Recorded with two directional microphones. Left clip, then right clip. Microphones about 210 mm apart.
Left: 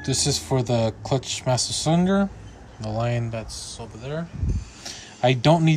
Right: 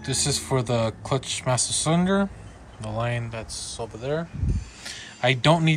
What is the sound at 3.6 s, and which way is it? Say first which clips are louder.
Speech: right 4 dB; 5° left (ahead or behind).